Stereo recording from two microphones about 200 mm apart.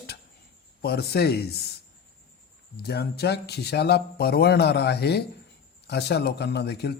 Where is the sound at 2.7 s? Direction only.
55° left (ahead or behind).